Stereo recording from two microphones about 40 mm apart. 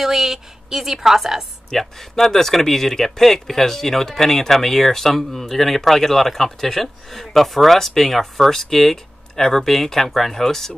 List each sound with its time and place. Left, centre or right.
0.0 s a woman's voice: centre
1.7 s speech: centre